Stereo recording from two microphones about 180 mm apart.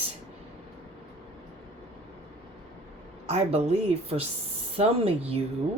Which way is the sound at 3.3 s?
35° right (ahead or behind).